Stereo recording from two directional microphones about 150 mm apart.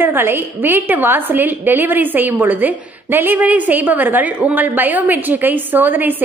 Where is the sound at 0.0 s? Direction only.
15° right (ahead or behind).